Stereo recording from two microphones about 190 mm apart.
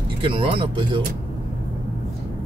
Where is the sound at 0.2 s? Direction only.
30° right (ahead or behind).